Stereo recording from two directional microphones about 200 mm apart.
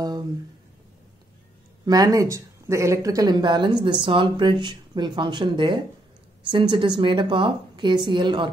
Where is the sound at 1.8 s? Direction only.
20° right (ahead or behind).